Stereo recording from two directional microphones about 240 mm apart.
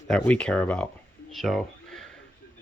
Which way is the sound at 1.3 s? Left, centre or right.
Centre.